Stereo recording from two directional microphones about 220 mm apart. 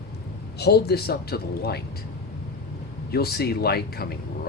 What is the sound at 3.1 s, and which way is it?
Speech, 45° left (ahead or behind).